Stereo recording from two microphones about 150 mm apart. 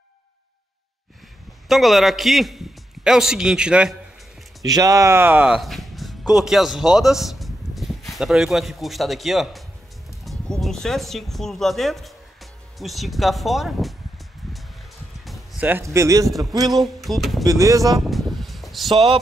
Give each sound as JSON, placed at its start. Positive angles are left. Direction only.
{"t": 1.7, "sound": "a man's voice", "side_deg": 0}
{"t": 4.6, "sound": "speech", "side_deg": -25}
{"t": 15.6, "sound": "speech", "side_deg": -15}
{"t": 16.7, "sound": "a sound", "side_deg": 0}
{"t": 17.5, "sound": "speech", "side_deg": -20}
{"t": 18.0, "sound": "a sound", "side_deg": 0}